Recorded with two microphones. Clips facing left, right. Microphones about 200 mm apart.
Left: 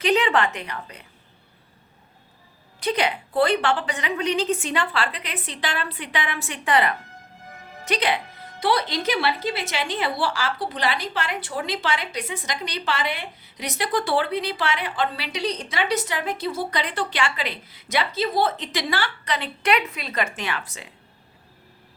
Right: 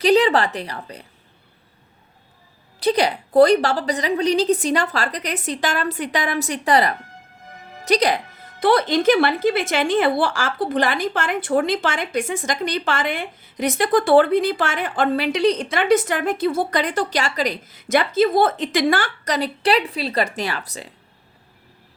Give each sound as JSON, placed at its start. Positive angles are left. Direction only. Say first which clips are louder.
{"t": 0.0, "sound": "a woman's voice", "louder": "right 5 dB", "side_deg": -35}
{"t": 2.8, "sound": "a woman's voice", "louder": "right 5 dB", "side_deg": -35}
{"t": 8.6, "sound": "a woman's voice", "louder": "right 7 dB", "side_deg": -50}